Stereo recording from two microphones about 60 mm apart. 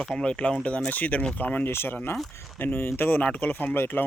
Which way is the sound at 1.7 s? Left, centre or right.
Left.